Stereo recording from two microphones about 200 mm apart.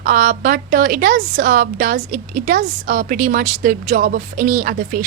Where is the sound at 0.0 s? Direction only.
45° right (ahead or behind).